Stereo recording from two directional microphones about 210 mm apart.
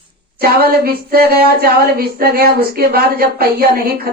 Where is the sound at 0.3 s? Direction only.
45° right (ahead or behind).